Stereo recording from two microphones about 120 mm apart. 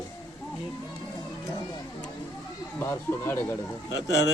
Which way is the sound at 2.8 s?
20° left (ahead or behind).